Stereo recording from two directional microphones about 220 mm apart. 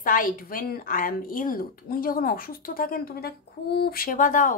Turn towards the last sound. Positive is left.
turn(degrees=35)  # may be behind; listen again after turning